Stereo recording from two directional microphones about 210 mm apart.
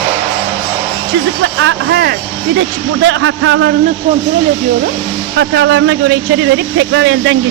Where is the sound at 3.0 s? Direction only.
65° right (ahead or behind).